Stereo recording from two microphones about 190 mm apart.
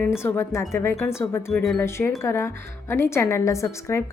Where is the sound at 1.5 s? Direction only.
Centre (ahead or behind).